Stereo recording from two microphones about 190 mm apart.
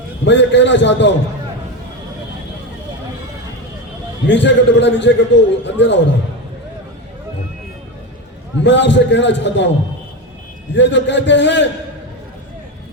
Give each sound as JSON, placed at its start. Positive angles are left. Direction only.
{"t": 0.3, "sound": "a man's voice", "side_deg": 70}
{"t": 4.3, "sound": "a man's voice", "side_deg": 70}
{"t": 8.6, "sound": "a man's voice", "side_deg": 70}
{"t": 10.8, "sound": "a man's voice", "side_deg": 70}